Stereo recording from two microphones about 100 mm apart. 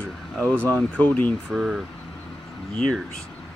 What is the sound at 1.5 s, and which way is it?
Speech, 5° right (ahead or behind).